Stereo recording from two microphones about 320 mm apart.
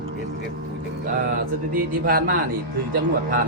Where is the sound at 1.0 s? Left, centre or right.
Right.